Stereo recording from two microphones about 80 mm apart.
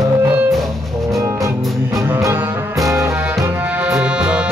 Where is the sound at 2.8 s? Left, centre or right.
Right.